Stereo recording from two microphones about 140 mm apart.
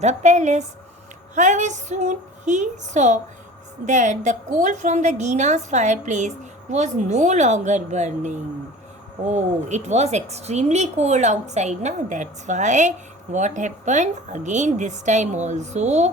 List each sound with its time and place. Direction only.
0.0 s a woman's voice: 55° right (ahead or behind)